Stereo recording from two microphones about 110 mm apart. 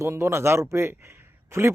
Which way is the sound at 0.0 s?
25° right (ahead or behind).